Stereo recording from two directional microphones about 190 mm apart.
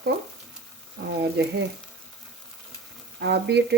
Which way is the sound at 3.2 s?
60° right (ahead or behind).